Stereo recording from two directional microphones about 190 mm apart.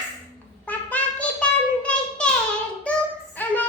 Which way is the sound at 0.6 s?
10° left (ahead or behind).